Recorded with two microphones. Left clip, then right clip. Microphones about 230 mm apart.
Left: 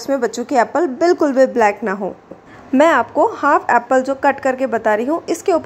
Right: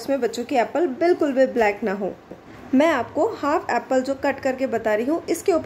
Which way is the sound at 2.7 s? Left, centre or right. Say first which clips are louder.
Left 7 dB; centre.